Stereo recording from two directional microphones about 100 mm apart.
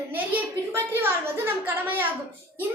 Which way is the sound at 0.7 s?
20° right (ahead or behind).